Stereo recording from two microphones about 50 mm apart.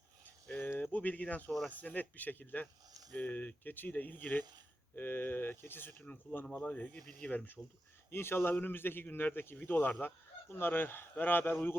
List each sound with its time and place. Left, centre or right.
0.5 s a sound: left
1.8 s speech: left
6.6 s speech: left
8.1 s speech: left